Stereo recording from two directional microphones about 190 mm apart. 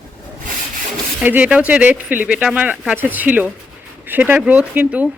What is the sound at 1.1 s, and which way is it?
Speech, 10° right (ahead or behind).